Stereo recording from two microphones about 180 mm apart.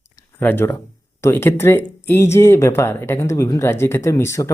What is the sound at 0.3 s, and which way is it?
A man's voice, 10° left (ahead or behind).